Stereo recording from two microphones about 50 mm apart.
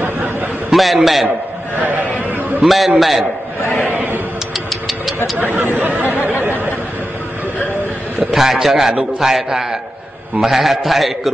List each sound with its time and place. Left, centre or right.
0.0 s a sound: right
0.7 s a man's voice: centre
1.8 s speech: right
2.6 s a man's voice: centre
3.9 s speech: right
4.6 s engine: centre
5.5 s speech: right
8.3 s a man's voice: centre